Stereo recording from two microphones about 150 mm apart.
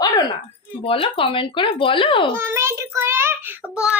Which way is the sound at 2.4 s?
15° right (ahead or behind).